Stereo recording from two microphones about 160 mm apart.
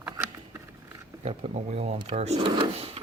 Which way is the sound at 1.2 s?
40° right (ahead or behind).